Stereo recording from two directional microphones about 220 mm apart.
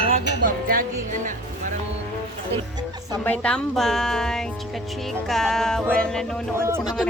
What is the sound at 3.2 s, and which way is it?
Speech, 5° left (ahead or behind).